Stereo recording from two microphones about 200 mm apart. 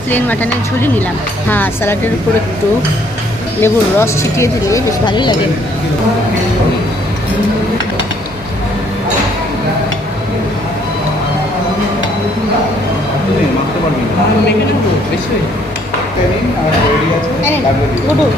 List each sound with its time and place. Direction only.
1.5 s speech: 10° left (ahead or behind)
3.6 s speech: 15° left (ahead or behind)